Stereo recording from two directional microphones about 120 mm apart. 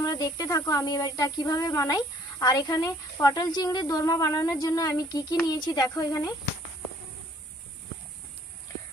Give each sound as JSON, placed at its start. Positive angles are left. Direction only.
{"t": 0.0, "sound": "speech", "side_deg": 30}